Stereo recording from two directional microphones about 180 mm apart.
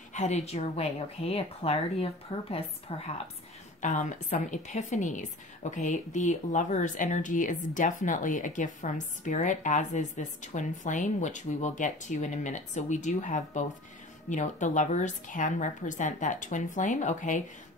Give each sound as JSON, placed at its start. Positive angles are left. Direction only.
{"t": 0.1, "sound": "speech", "side_deg": 40}
{"t": 3.8, "sound": "a woman's voice", "side_deg": 45}